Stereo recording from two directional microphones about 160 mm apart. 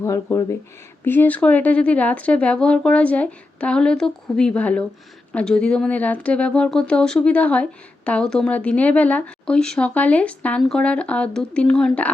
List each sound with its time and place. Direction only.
0.0 s speech: 15° left (ahead or behind)